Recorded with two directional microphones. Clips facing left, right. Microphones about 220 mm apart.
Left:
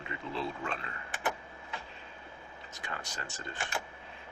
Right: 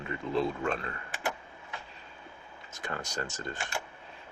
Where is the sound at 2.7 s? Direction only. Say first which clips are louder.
Right 6 dB; 45° right (ahead or behind).